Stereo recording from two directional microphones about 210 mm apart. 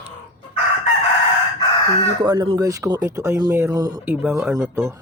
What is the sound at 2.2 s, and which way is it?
Speech, 20° right (ahead or behind).